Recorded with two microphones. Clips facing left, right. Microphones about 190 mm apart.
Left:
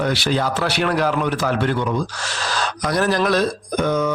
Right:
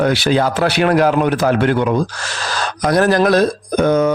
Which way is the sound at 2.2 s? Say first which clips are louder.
Right 1 dB; 50° right (ahead or behind).